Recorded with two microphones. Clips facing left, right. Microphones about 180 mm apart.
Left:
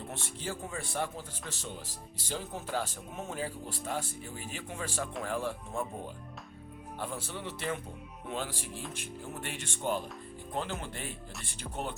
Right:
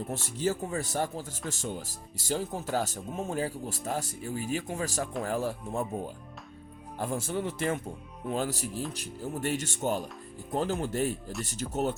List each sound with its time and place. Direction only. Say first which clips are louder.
0.3 s speech: right 10 dB; 40° right (ahead or behind)
7.0 s speech: right 8 dB; 45° right (ahead or behind)